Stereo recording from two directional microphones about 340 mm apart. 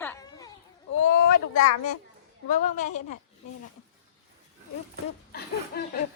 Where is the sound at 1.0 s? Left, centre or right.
Left.